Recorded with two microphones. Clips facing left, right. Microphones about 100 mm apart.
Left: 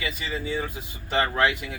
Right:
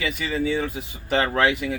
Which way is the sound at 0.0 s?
80° right.